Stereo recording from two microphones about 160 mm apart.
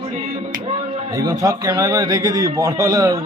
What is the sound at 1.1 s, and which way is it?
A man's voice, 25° right (ahead or behind).